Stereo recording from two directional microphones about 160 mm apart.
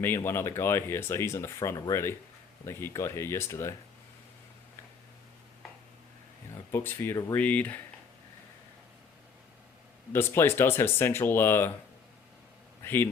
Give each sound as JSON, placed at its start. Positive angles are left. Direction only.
{"t": 0.0, "sound": "speech", "side_deg": 15}
{"t": 6.7, "sound": "speech", "side_deg": 15}
{"t": 10.1, "sound": "speech", "side_deg": 15}
{"t": 12.8, "sound": "a sound", "side_deg": 15}